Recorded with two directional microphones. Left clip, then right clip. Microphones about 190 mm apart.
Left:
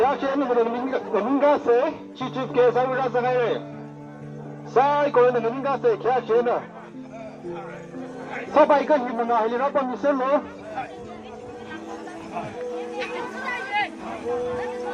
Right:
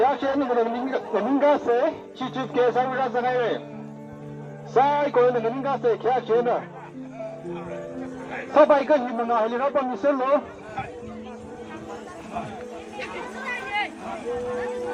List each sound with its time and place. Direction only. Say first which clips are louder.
0.0 s speech: even; 50° right (ahead or behind)
4.7 s speech: left 1 dB; 50° right (ahead or behind)
8.5 s speech: even; 40° right (ahead or behind)